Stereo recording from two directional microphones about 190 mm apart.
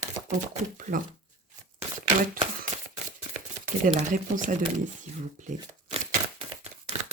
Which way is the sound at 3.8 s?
45° right (ahead or behind).